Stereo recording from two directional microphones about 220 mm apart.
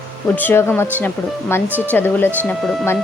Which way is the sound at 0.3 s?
10° left (ahead or behind).